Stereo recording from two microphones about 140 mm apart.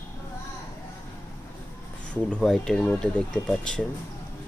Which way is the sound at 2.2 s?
5° left (ahead or behind).